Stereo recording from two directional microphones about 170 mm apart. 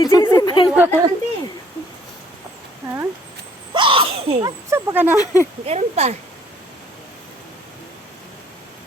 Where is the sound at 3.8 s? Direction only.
30° right (ahead or behind).